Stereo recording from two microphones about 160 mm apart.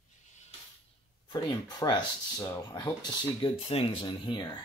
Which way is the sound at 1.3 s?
30° left (ahead or behind).